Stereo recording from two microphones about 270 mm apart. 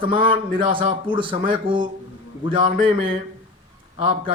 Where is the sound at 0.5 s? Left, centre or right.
Centre.